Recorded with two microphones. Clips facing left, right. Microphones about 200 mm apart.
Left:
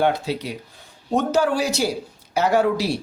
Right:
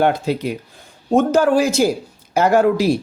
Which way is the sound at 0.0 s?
50° right (ahead or behind).